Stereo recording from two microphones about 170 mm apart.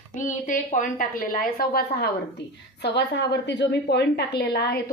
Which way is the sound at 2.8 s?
80° left.